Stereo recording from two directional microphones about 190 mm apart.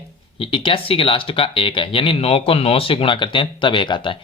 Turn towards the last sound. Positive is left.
turn(degrees=25)  # may be behind; listen again after turning